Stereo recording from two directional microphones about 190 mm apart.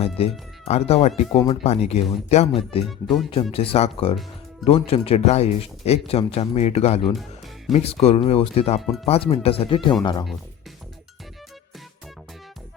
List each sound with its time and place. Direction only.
0.2 s speech: 30° left (ahead or behind)
2.8 s speech: centre (ahead or behind)
3.5 s speech: 30° left (ahead or behind)
7.1 s speech: centre (ahead or behind)
7.7 s speech: 30° left (ahead or behind)